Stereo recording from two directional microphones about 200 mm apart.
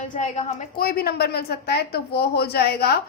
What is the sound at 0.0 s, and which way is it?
A woman's voice, 35° left (ahead or behind).